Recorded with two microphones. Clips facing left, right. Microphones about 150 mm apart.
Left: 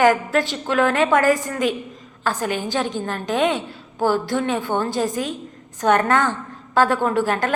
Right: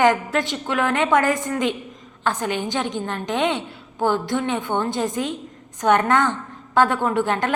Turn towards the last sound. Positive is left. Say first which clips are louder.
# left 1 dB
turn(degrees=-20)  # may be behind; listen again after turning